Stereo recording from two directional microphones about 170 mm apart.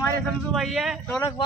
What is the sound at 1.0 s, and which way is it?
Speech, 10° left (ahead or behind).